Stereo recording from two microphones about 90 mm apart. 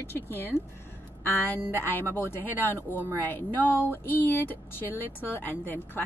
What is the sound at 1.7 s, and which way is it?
Speech, 25° left (ahead or behind).